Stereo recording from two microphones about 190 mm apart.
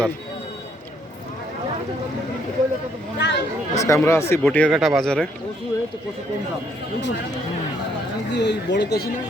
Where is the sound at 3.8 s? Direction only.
15° left (ahead or behind).